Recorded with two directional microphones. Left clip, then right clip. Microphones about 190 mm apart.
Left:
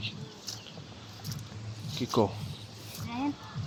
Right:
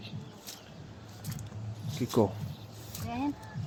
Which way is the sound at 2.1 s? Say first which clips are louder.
Even; 5° right (ahead or behind).